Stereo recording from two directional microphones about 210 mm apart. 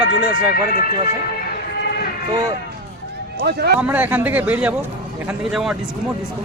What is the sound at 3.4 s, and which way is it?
Speech, 50° right (ahead or behind).